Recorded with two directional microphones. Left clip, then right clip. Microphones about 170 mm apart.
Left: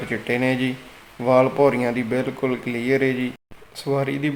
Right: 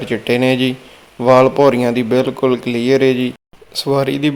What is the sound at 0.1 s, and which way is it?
Speech, 35° right (ahead or behind).